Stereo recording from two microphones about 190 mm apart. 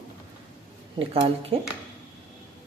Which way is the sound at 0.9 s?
30° right (ahead or behind).